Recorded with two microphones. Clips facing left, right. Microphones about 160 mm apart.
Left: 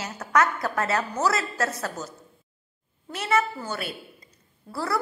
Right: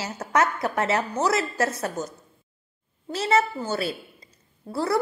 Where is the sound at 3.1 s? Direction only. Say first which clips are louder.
Right 3 dB; 30° right (ahead or behind).